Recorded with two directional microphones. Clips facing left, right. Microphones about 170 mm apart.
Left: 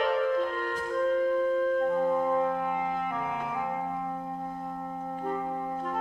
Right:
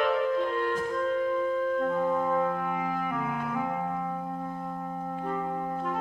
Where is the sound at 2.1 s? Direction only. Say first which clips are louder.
Left 1 dB; 20° left (ahead or behind).